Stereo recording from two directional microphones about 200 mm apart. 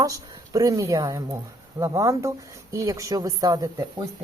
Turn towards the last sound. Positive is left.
turn(degrees=-20)  # may be behind; listen again after turning